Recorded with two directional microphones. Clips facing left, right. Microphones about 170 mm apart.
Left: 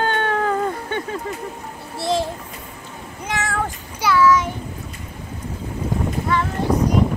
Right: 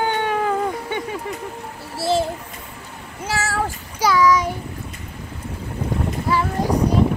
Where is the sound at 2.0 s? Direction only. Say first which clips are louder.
Right 1 dB; 5° right (ahead or behind).